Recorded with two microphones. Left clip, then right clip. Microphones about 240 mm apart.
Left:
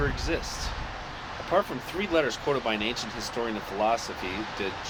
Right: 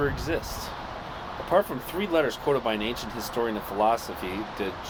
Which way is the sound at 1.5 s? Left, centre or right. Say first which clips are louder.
Right 2 dB; right.